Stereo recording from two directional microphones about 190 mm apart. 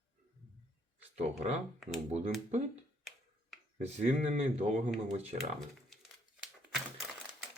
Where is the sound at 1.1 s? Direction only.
35° right (ahead or behind).